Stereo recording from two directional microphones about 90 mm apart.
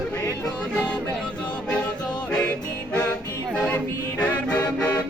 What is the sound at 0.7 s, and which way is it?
Music, 15° left (ahead or behind).